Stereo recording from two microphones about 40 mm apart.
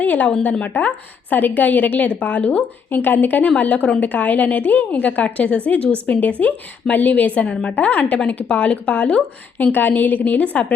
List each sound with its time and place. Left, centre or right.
0.0 s a woman's voice: left
1.3 s a woman's voice: left
2.9 s a woman's voice: left
8.2 s a woman's voice: left
9.9 s a woman's voice: left